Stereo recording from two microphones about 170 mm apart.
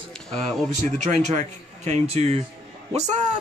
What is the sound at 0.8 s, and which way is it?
Snicker, 45° right (ahead or behind).